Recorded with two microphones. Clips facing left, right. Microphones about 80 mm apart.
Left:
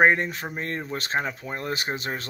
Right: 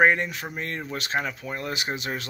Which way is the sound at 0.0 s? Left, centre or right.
Left.